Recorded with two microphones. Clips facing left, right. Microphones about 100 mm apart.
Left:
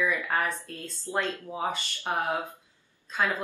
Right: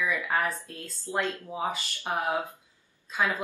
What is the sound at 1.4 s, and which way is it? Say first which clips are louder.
Speech: even; 10° right (ahead or behind).